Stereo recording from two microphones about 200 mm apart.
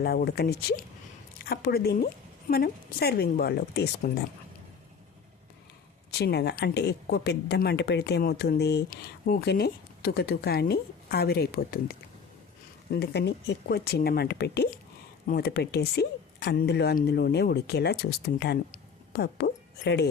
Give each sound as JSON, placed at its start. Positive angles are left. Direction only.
{"t": 0.0, "sound": "a woman's voice", "side_deg": 50}
{"t": 6.1, "sound": "a woman's voice", "side_deg": 55}